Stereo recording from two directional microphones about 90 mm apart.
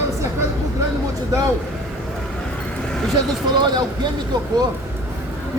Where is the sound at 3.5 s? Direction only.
50° right (ahead or behind).